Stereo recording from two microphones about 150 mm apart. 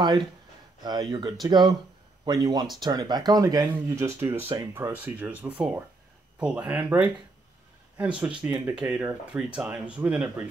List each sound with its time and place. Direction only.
0.8 s speech: 30° right (ahead or behind); by 10.4 s 10° right (ahead or behind)